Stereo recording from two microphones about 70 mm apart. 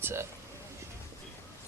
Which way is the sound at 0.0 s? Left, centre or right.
Right.